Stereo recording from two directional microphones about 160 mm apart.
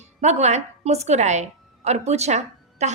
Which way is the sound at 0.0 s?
45° right (ahead or behind).